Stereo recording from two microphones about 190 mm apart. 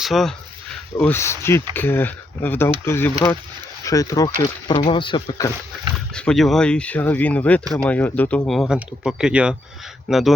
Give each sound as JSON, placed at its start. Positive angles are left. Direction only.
{"t": 0.0, "sound": "speech", "side_deg": 0}
{"t": 1.0, "sound": "speech", "side_deg": 15}
{"t": 6.1, "sound": "speech", "side_deg": 5}